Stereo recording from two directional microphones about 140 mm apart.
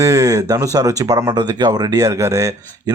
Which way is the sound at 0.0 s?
25° right (ahead or behind).